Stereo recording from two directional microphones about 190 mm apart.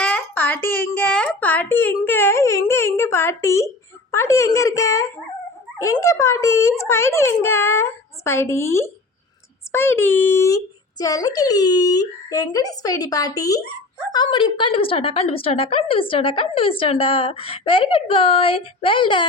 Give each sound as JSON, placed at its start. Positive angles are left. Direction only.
{"t": 0.0, "sound": "a child's voice", "side_deg": 10}